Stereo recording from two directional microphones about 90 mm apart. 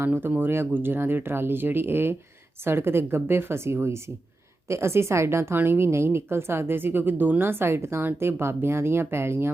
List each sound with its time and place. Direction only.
0.0 s a woman's voice: 25° right (ahead or behind)